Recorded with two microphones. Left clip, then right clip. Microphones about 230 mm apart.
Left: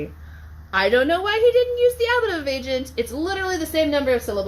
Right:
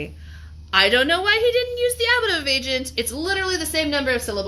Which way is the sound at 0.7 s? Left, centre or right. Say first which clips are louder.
Right 1 dB; right.